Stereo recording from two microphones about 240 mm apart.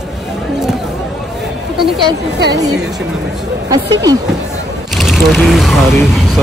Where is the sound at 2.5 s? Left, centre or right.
Centre.